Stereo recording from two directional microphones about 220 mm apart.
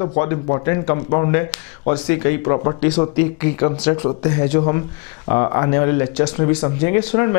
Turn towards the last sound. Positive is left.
turn(degrees=10)  # may be behind; listen again after turning